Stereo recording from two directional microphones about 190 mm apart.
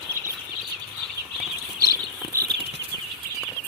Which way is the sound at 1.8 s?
20° right (ahead or behind).